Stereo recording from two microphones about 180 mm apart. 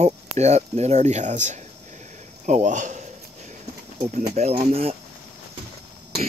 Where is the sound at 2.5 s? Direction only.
40° right (ahead or behind).